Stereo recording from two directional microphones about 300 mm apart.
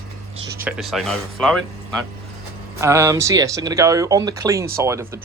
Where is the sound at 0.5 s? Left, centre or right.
Centre.